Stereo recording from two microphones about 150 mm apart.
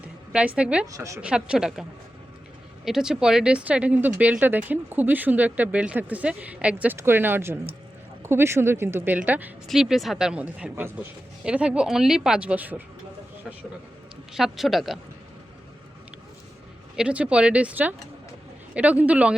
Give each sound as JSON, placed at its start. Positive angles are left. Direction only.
{"t": 0.3, "sound": "speech", "side_deg": -10}
{"t": 0.9, "sound": "a woman's voice", "side_deg": -20}
{"t": 1.2, "sound": "a woman's voice", "side_deg": -5}
{"t": 2.8, "sound": "a woman's voice", "side_deg": -5}
{"t": 14.3, "sound": "a woman's voice", "side_deg": 0}
{"t": 17.0, "sound": "speech", "side_deg": -5}